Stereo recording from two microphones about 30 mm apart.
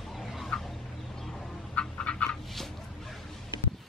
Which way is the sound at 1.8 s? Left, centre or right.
Left.